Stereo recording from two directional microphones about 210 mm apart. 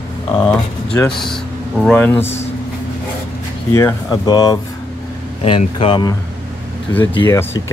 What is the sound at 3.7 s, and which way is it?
Speech, 15° left (ahead or behind).